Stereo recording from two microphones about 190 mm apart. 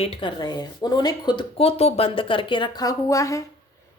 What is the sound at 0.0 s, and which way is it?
A woman's voice, 30° left (ahead or behind).